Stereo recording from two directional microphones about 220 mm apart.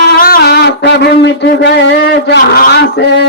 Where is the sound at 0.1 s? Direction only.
45° left (ahead or behind).